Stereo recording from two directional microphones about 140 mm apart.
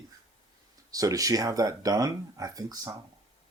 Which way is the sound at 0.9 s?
25° right (ahead or behind).